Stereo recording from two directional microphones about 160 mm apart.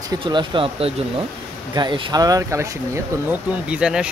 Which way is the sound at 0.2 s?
30° right (ahead or behind).